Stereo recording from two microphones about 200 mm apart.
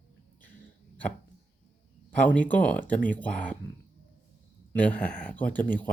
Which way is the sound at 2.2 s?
5° left (ahead or behind).